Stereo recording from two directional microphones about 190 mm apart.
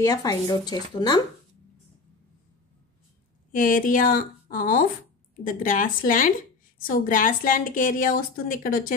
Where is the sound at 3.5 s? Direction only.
45° left (ahead or behind).